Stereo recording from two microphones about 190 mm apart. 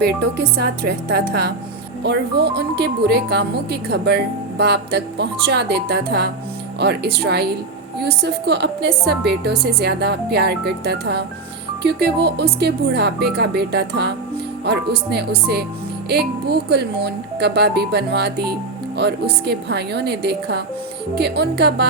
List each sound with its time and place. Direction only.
0.0 s speech: 60° right (ahead or behind)